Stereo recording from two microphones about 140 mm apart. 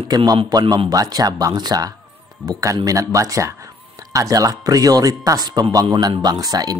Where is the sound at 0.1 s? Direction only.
30° right (ahead or behind).